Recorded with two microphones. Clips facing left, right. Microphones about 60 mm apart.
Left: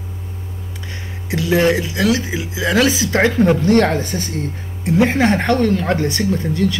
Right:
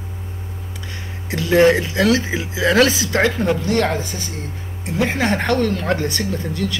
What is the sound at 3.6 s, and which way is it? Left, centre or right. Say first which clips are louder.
Speech: left 5 dB; left.